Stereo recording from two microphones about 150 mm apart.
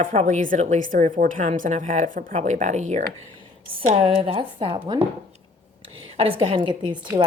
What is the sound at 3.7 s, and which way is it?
A woman's voice, 40° right (ahead or behind).